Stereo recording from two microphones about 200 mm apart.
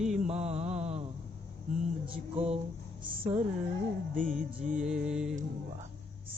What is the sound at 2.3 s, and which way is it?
Music, 30° right (ahead or behind).